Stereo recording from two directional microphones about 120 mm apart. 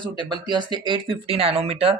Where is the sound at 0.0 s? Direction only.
40° right (ahead or behind).